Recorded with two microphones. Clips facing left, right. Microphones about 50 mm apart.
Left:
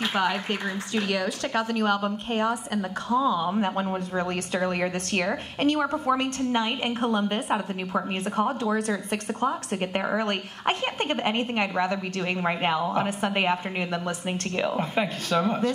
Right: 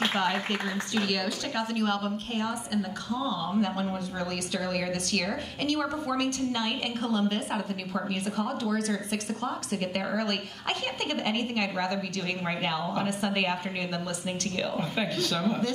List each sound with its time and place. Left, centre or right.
0.1 s speech: centre
14.6 s speech: left